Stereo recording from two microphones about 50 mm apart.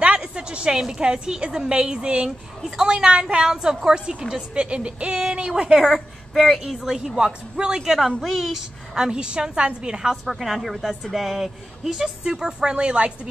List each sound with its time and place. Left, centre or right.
0.0 s a woman's voice: centre
8.9 s a woman's voice: centre
10.2 s a woman's voice: centre; by 13.3 s right